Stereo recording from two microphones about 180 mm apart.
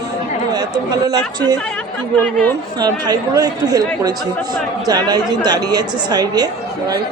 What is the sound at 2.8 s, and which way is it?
Speech, 20° right (ahead or behind).